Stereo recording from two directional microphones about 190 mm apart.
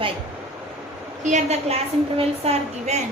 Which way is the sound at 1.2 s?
40° right (ahead or behind).